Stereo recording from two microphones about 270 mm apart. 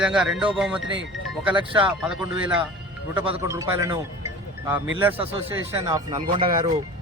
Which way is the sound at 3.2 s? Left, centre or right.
Centre.